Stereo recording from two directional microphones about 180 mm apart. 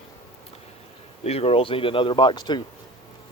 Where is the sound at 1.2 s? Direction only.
35° left (ahead or behind).